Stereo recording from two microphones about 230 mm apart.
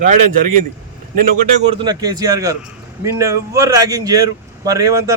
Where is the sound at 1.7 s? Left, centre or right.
Centre.